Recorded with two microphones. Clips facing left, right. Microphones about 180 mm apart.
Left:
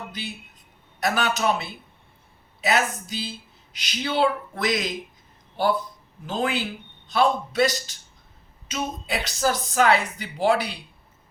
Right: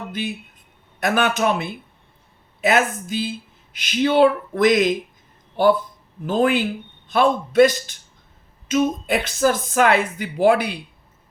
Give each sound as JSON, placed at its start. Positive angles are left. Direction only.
{"t": 0.1, "sound": "a man's voice", "side_deg": -55}
{"t": 6.2, "sound": "speech", "side_deg": -50}